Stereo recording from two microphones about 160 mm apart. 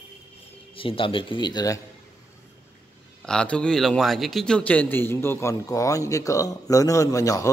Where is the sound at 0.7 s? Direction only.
35° left (ahead or behind).